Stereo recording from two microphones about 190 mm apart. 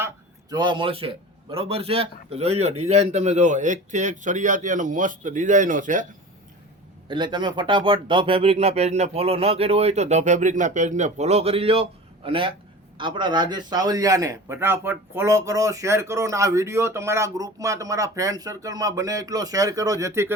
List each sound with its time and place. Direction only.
0.5 s a man's voice: 25° right (ahead or behind); by 6.1 s 45° right (ahead or behind)
7.1 s a man's voice: 25° right (ahead or behind)